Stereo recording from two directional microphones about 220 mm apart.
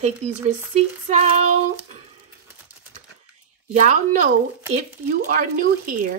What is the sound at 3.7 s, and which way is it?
Speech, 35° right (ahead or behind).